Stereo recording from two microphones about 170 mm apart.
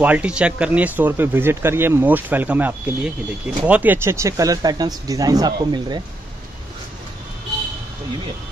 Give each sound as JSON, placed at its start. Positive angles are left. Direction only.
{"t": 0.0, "sound": "speech", "side_deg": -10}